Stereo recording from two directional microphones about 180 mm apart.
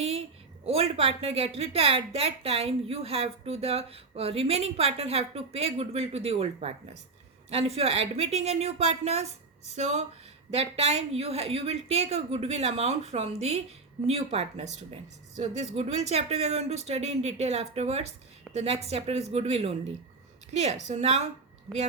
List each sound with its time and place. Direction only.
0.6 s a woman's voice: 35° right (ahead or behind)